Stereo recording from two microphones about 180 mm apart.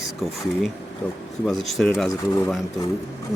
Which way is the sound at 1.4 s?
Centre (ahead or behind).